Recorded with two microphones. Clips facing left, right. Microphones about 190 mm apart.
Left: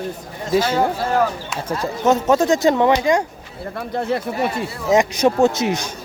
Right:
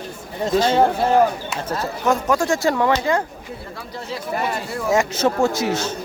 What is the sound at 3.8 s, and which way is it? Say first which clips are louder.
Speech: left 11 dB; 60° left (ahead or behind).